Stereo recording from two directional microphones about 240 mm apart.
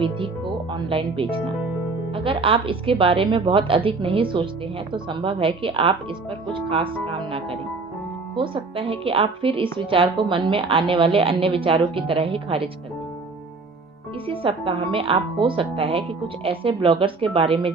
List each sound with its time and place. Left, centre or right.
0.0 s a woman's voice: right
14.2 s a woman's voice: right